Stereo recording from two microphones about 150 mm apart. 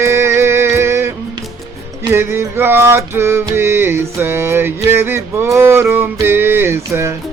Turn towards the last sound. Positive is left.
turn(degrees=-20)  # may be behind; listen again after turning